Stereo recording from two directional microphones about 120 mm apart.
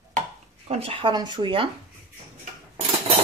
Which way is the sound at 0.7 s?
55° right (ahead or behind).